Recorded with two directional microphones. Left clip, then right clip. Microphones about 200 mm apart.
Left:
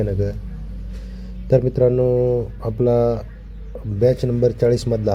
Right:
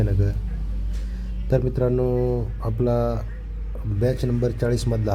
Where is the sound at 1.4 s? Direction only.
15° left (ahead or behind).